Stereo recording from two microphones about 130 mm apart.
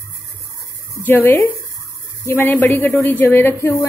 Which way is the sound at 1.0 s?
15° left (ahead or behind).